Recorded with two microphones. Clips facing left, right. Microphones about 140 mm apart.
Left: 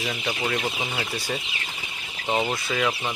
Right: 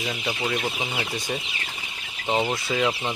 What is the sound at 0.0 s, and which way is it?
Speech, 5° right (ahead or behind).